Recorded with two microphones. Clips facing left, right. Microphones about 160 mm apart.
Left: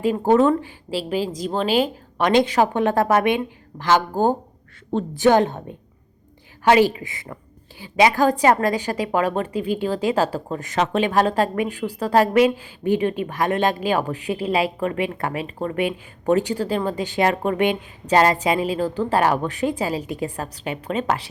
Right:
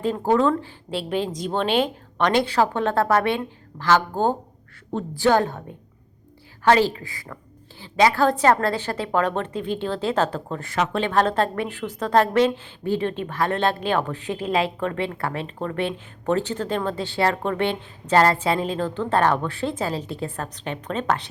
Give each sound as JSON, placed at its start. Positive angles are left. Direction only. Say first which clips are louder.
{"t": 0.0, "sound": "a woman's voice", "louder": "left 3 dB", "side_deg": 15}
{"t": 0.9, "sound": "a woman's voice", "louder": "left 1 dB", "side_deg": 5}
{"t": 4.9, "sound": "a woman's voice", "louder": "left 3 dB", "side_deg": 25}
{"t": 6.7, "sound": "a woman's voice", "louder": "left 2 dB", "side_deg": 15}